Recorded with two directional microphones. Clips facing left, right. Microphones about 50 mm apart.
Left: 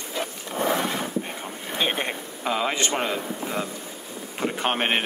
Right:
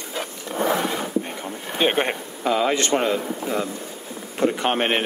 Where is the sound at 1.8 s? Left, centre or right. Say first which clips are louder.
Right 5 dB; centre.